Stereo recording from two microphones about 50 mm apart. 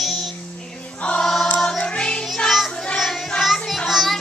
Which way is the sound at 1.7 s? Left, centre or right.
Centre.